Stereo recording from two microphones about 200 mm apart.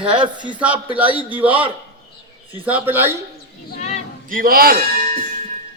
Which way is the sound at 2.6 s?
10° right (ahead or behind).